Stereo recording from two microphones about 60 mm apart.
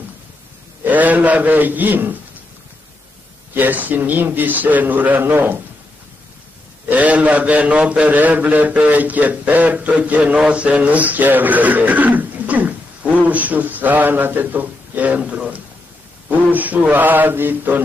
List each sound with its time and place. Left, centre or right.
0.8 s a man's voice: right
3.5 s speech: right
6.9 s a man's voice: right